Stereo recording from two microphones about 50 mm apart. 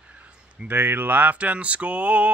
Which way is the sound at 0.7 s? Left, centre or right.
Right.